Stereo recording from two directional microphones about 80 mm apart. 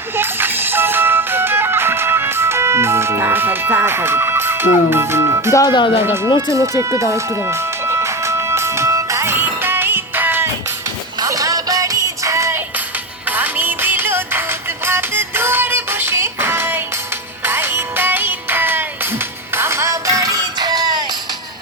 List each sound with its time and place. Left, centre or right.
0.2 s music: right
5.6 s speech: left
6.5 s music: right
11.2 s music: right
13.2 s music: right